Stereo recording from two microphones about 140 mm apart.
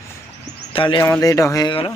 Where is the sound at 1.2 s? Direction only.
25° left (ahead or behind).